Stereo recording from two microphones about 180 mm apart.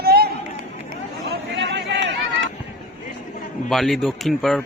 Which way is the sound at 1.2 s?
80° right.